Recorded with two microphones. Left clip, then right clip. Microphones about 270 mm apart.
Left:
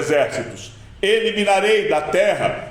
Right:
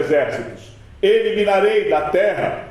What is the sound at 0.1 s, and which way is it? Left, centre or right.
A man's voice, left.